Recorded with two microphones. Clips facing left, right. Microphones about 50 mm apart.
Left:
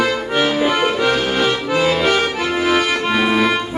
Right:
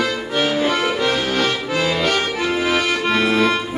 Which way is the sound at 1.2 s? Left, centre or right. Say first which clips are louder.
Left 2 dB; centre.